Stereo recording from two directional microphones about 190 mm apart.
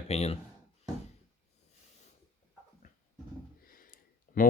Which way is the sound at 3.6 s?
50° left (ahead or behind).